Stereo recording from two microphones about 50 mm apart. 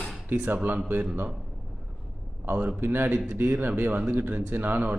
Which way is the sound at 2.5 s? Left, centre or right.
Right.